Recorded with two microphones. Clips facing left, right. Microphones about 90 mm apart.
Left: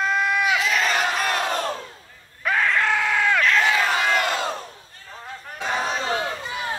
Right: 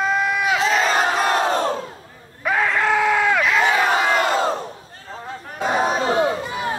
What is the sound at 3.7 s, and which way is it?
Crowd, 35° right (ahead or behind).